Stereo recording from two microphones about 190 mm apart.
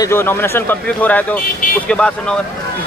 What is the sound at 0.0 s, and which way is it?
Speech, 10° left (ahead or behind).